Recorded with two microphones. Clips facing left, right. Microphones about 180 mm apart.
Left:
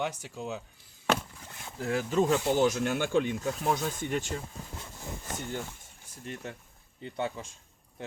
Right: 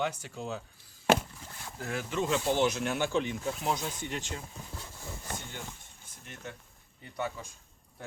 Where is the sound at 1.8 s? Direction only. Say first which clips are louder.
Left 6 dB; 30° left (ahead or behind); by 4.4 s 50° left (ahead or behind).